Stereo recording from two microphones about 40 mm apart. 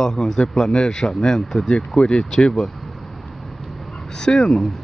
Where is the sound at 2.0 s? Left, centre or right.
Left.